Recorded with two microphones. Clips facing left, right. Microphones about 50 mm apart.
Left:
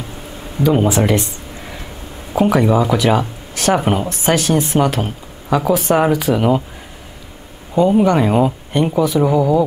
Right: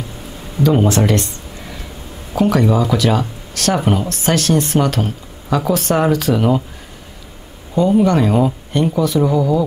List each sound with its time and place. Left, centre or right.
0.6 s speech: centre
7.7 s speech: centre